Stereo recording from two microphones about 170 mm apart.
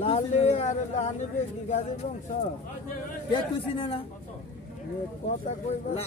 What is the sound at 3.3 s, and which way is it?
Speech, 30° left (ahead or behind).